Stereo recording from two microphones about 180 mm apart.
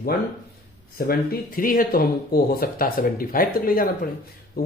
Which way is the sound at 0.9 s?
55° left (ahead or behind).